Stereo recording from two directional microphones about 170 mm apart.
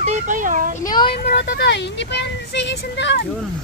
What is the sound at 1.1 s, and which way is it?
Speech, 80° left.